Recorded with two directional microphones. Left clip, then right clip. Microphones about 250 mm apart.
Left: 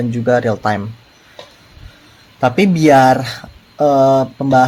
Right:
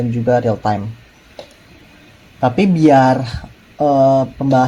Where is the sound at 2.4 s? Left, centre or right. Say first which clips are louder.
Left 1 dB; left.